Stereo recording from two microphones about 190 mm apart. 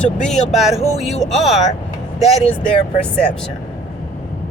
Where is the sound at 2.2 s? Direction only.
35° left (ahead or behind).